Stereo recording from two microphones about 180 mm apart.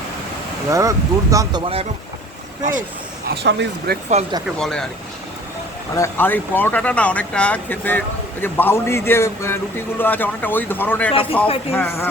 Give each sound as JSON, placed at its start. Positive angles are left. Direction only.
{"t": 0.7, "sound": "speech", "side_deg": -20}
{"t": 1.6, "sound": "speech", "side_deg": -35}
{"t": 3.2, "sound": "speech", "side_deg": -65}
{"t": 4.1, "sound": "speech", "side_deg": -40}
{"t": 4.6, "sound": "speech", "side_deg": 5}
{"t": 5.9, "sound": "speech", "side_deg": 15}
{"t": 11.1, "sound": "a man's voice", "side_deg": 30}
{"t": 11.7, "sound": "speech", "side_deg": 10}